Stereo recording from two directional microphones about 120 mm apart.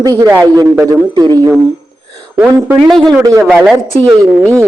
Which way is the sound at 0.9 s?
35° right (ahead or behind).